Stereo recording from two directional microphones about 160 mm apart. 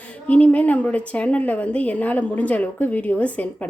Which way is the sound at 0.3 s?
10° left (ahead or behind).